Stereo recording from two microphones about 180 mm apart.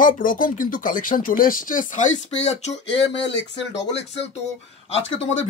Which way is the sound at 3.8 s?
75° left (ahead or behind).